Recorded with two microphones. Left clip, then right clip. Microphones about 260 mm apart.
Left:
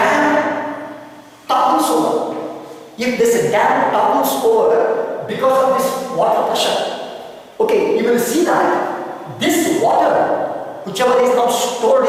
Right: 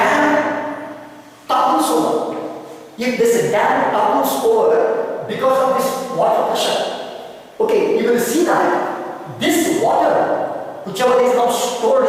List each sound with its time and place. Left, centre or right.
0.0 s a sound: centre
1.9 s a sound: right
3.0 s a woman's voice: centre
4.3 s speech: right
4.6 s a man's voice: centre
7.9 s a woman's voice: centre